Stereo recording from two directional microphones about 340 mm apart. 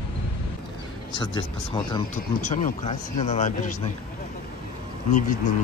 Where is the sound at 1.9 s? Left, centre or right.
Left.